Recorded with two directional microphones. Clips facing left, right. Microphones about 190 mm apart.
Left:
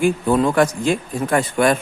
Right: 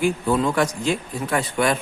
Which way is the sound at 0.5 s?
50° left (ahead or behind).